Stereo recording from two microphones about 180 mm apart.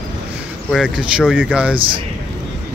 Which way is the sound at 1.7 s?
30° right (ahead or behind).